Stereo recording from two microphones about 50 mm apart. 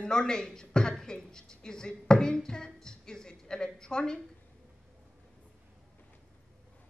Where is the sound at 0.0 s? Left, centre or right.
Centre.